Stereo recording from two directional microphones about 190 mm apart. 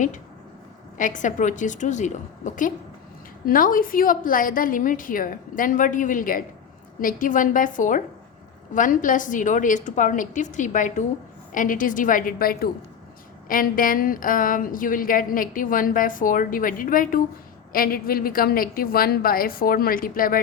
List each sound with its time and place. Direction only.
0.9 s a woman's voice: 40° left (ahead or behind)